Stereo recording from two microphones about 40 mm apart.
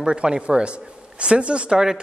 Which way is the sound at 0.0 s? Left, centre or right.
Right.